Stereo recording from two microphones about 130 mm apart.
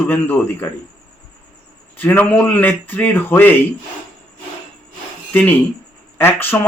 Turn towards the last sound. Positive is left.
turn(degrees=15)  # may be behind; listen again after turning